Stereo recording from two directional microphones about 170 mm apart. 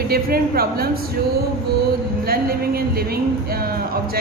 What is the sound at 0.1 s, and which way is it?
Speech, 65° right (ahead or behind).